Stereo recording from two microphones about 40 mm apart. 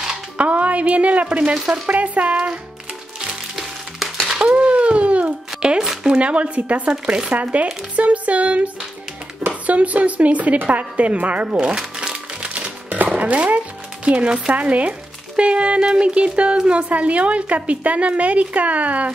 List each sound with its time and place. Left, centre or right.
0.4 s a woman's voice: right
1.4 s speech: right
1.9 s a woman's voice: right
3.5 s a sound: centre
4.4 s a sound: right
5.6 s a woman's voice: right
11.4 s speech: right
11.8 s crumpling: centre
12.4 s music: right
13.1 s speech: right
14.5 s a woman's voice: right